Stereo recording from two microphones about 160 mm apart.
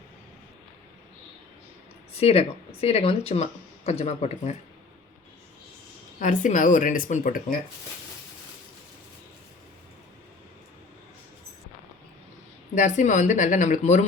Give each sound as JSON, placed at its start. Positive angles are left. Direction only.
{"t": 2.1, "sound": "speech", "side_deg": 40}
{"t": 6.1, "sound": "speech", "side_deg": 50}
{"t": 12.7, "sound": "speech", "side_deg": 50}